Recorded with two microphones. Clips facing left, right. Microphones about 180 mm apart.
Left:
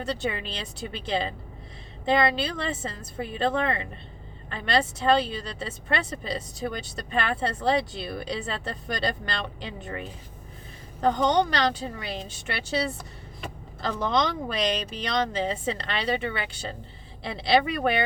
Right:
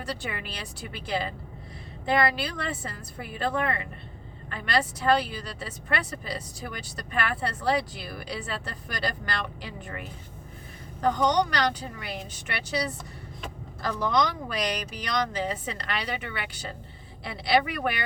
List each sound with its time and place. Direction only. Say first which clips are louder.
0.0 s speech: left 5 dB; 25° left (ahead or behind)
11.0 s speech: left 1 dB; 25° left (ahead or behind)